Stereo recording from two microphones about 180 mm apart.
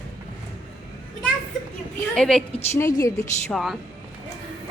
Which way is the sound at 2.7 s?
15° left (ahead or behind).